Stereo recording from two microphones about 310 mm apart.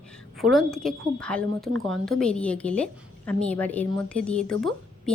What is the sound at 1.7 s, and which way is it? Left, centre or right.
Speech, right.